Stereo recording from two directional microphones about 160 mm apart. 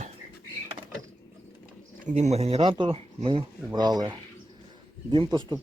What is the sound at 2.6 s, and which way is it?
Speech, 30° right (ahead or behind).